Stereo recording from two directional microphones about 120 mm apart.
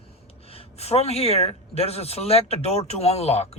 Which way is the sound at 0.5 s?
55° left (ahead or behind).